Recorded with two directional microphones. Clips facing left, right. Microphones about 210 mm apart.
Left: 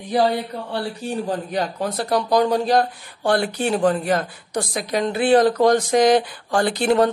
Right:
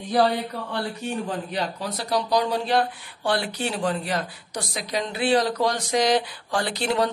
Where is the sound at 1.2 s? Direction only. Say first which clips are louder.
Left 4 dB; 45° left (ahead or behind).